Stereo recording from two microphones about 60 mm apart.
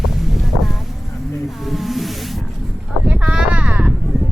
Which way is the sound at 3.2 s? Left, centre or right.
Centre.